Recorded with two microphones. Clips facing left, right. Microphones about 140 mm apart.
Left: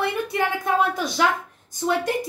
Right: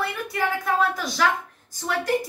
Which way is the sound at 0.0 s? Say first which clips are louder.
Left 3 dB; 20° left (ahead or behind).